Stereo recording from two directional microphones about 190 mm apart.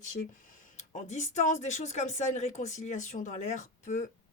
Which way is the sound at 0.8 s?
35° left (ahead or behind).